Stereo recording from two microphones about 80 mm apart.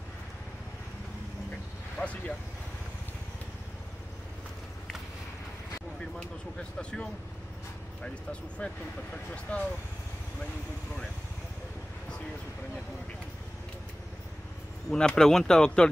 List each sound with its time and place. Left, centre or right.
2.0 s vehicle: centre
6.8 s speech: centre
14.9 s speech: centre